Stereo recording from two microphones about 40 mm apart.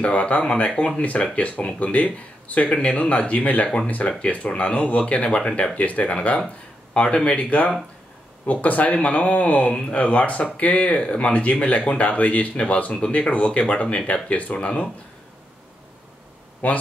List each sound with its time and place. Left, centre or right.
0.0 s speech: left
5.8 s speech: left
6.9 s a sound: left
7.2 s speech: left
12.9 s speech: left
16.6 s speech: left